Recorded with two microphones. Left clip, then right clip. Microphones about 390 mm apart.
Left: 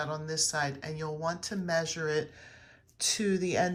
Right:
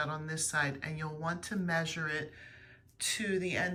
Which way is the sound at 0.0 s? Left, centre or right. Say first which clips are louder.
Left 4 dB; centre.